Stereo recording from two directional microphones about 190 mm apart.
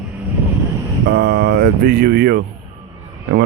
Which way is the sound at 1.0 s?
55° right (ahead or behind).